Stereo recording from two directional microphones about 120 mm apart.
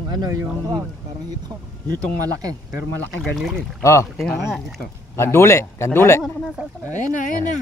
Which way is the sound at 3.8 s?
25° left (ahead or behind).